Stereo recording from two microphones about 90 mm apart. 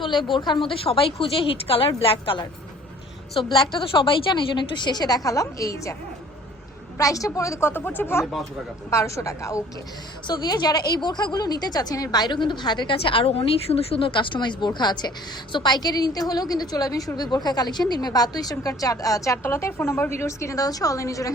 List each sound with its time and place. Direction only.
0.3 s a woman's voice: 60° left (ahead or behind); by 6.0 s 35° left (ahead or behind)
7.0 s a woman's voice: 40° left (ahead or behind)
7.7 s speech: 20° left (ahead or behind)
8.2 s speech: centre (ahead or behind)
8.9 s a woman's voice: 35° left (ahead or behind)
10.2 s a woman's voice: 50° left (ahead or behind)